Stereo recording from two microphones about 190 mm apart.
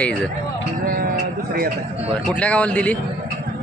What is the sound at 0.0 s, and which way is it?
Speech, 10° left (ahead or behind).